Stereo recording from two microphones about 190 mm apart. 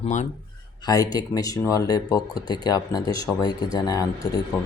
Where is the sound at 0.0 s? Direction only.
40° left (ahead or behind).